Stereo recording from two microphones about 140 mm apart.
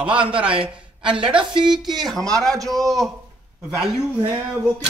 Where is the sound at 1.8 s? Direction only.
Centre (ahead or behind).